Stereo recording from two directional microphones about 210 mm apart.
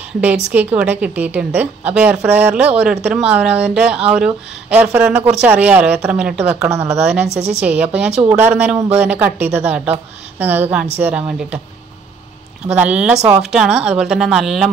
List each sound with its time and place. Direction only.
0.2 s a woman's voice: 5° right (ahead or behind)
12.6 s a woman's voice: 5° right (ahead or behind)